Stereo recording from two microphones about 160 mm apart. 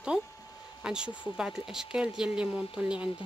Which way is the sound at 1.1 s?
30° left (ahead or behind).